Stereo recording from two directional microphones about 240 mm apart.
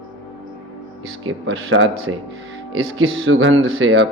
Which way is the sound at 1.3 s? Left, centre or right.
Right.